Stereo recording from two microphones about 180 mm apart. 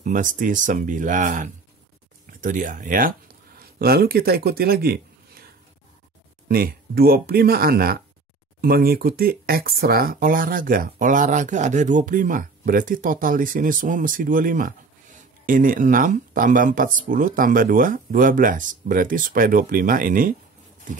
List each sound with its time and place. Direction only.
0.0 s speech: 45° right (ahead or behind)
6.5 s speech: 55° right (ahead or behind)